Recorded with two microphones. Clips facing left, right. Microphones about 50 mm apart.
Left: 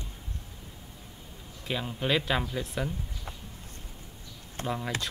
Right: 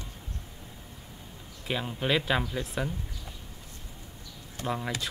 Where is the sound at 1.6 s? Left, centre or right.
Centre.